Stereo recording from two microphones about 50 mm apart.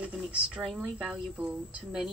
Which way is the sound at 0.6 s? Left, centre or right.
Centre.